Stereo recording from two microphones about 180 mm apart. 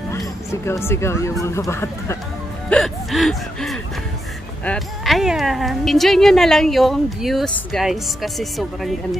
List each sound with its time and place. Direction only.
0.1 s speech: 15° left (ahead or behind)
2.7 s speech: centre (ahead or behind)